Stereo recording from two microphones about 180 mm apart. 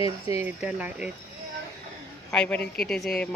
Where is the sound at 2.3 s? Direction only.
5° left (ahead or behind).